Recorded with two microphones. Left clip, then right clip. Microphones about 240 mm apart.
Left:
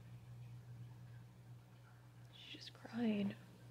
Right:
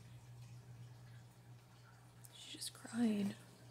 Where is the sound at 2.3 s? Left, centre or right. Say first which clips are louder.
Right 4 dB; right.